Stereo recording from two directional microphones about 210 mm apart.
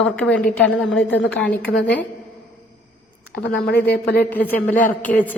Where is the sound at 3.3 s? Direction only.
55° left (ahead or behind).